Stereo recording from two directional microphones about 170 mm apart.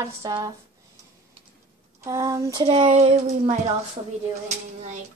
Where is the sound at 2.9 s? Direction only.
40° right (ahead or behind).